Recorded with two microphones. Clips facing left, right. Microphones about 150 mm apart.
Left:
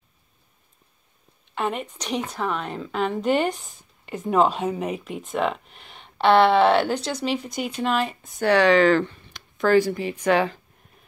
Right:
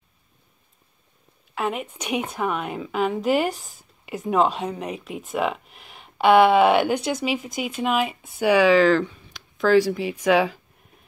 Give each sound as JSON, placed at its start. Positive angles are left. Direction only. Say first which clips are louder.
{"t": 1.5, "sound": "a woman's voice", "louder": "even", "side_deg": -5}